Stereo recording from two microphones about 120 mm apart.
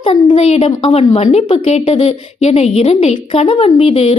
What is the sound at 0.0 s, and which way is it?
Speech, 45° left (ahead or behind).